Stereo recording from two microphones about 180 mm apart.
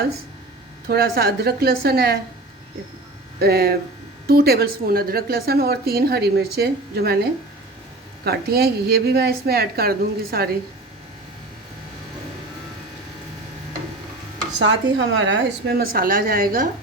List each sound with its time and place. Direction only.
0.9 s a woman's voice: 60° right (ahead or behind)
3.4 s a woman's voice: 60° right (ahead or behind)
8.2 s a woman's voice: 60° right (ahead or behind)
14.6 s a woman's voice: 90° right; by 16.6 s 55° right (ahead or behind)